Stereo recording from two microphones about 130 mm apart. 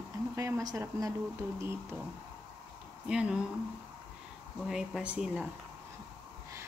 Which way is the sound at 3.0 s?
5° right (ahead or behind).